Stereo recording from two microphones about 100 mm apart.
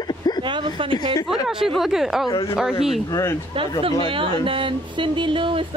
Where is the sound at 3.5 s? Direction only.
65° right (ahead or behind).